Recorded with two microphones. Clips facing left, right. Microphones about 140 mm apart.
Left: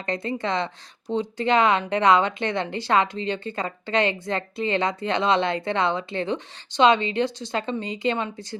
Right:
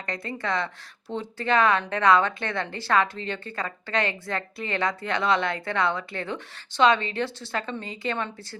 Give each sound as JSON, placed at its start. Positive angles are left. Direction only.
{"t": 0.0, "sound": "a woman's voice", "side_deg": 25}